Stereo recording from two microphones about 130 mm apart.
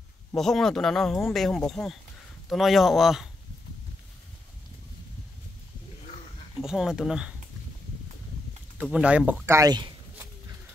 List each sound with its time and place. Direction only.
0.4 s speech: 5° left (ahead or behind)
6.6 s speech: 5° right (ahead or behind)
8.9 s speech: 10° right (ahead or behind)
9.6 s speech: 35° right (ahead or behind)